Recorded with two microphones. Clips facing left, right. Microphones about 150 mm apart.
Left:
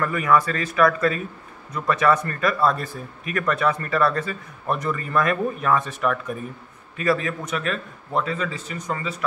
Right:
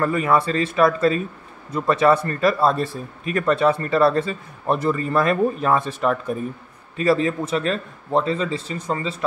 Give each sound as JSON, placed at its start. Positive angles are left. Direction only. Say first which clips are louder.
{"t": 0.0, "sound": "speech", "louder": "right 1 dB", "side_deg": -30}